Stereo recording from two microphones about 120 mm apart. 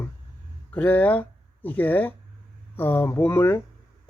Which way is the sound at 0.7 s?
15° left (ahead or behind).